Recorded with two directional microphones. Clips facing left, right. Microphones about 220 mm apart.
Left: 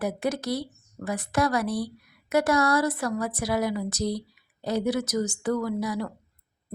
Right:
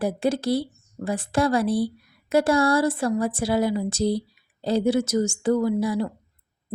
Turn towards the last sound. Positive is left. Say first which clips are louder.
# right 5 dB
turn(degrees=-30)  # may be behind; listen again after turning